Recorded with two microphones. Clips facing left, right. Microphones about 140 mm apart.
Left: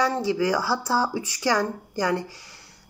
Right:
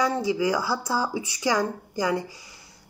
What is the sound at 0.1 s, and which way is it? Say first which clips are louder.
Speech: left 1 dB; 10° right (ahead or behind).